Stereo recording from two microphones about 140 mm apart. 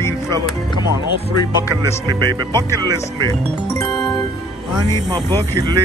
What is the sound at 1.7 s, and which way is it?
Speech, 30° right (ahead or behind).